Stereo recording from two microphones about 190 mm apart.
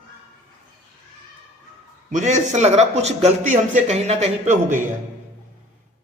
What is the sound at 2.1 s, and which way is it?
A man's voice, 40° right (ahead or behind).